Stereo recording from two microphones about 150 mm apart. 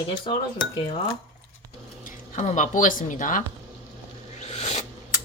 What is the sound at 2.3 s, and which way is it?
Speech, 50° left (ahead or behind).